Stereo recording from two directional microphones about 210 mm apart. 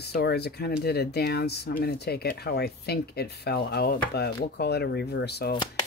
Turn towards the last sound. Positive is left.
turn(degrees=50)  # may be behind; listen again after turning